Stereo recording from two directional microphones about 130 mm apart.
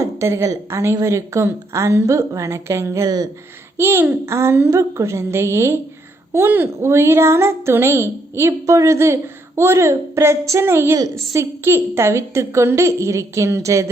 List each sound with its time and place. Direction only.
0.0 s a woman's voice: 20° right (ahead or behind)
3.8 s a woman's voice: 15° right (ahead or behind)